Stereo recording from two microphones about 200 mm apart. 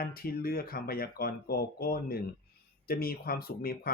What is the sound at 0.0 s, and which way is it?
Speech, 45° left (ahead or behind).